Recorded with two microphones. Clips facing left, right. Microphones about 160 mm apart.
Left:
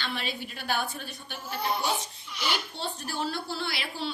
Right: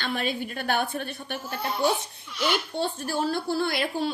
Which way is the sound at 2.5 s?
50° right (ahead or behind).